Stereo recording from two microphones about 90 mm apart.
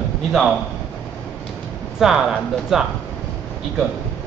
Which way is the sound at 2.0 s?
5° right (ahead or behind).